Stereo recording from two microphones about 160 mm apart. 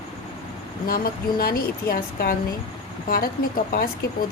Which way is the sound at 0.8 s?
65° left (ahead or behind).